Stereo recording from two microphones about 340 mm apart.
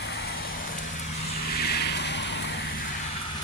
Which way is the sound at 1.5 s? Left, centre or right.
Left.